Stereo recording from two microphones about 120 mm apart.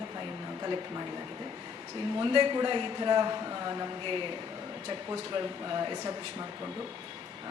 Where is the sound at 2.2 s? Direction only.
40° right (ahead or behind).